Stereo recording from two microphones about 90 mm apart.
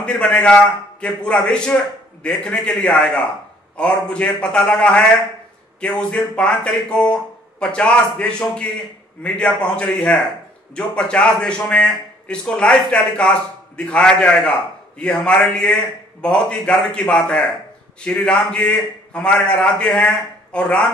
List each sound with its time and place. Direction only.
0.3 s a man's voice: 10° left (ahead or behind)